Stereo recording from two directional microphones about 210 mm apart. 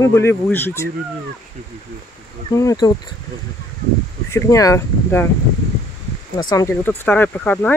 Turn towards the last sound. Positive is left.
turn(degrees=10)  # may be behind; listen again after turning